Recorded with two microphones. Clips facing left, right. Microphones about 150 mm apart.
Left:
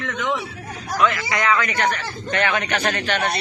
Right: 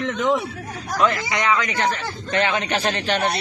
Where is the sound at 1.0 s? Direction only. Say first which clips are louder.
Even; 35° right (ahead or behind).